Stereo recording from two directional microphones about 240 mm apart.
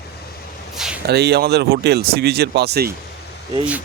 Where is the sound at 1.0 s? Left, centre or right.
Right.